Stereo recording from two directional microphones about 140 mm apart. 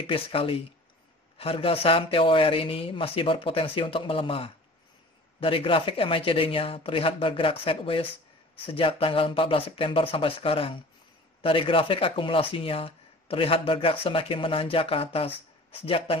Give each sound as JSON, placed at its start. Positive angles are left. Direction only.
{"t": 0.0, "sound": "speech", "side_deg": 40}